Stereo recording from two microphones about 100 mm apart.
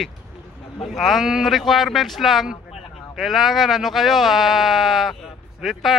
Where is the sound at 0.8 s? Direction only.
Centre (ahead or behind).